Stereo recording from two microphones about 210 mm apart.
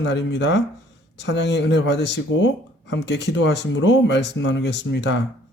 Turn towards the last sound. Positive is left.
turn(degrees=55)  # may be behind; listen again after turning